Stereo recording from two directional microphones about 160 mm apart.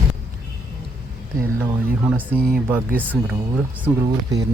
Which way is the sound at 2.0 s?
10° right (ahead or behind).